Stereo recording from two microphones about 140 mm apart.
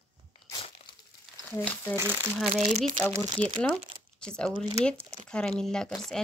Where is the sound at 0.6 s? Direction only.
45° left (ahead or behind).